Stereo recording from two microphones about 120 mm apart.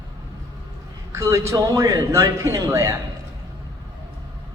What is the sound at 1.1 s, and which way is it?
A man's voice, 25° right (ahead or behind).